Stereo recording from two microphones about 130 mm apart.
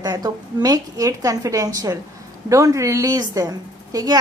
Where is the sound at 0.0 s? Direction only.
30° right (ahead or behind).